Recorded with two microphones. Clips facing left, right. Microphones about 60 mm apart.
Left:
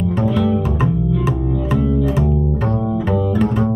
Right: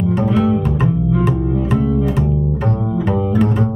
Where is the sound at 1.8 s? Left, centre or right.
Right.